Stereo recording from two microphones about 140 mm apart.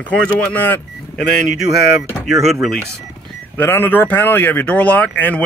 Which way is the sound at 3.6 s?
15° left (ahead or behind).